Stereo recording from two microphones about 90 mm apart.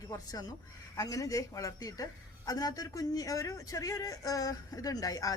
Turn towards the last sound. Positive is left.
turn(degrees=45)  # may be behind; listen again after turning